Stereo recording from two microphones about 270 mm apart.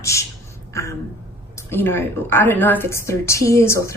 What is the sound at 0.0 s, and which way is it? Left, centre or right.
Speech, centre.